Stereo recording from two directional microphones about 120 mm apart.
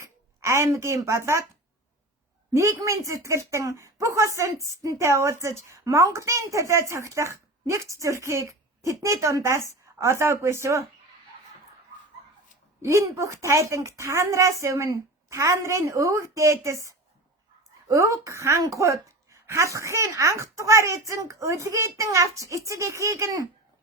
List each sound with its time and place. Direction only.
0.3 s a woman's voice: 25° right (ahead or behind)
2.5 s a woman's voice: 25° right (ahead or behind)
12.8 s a woman's voice: 25° right (ahead or behind)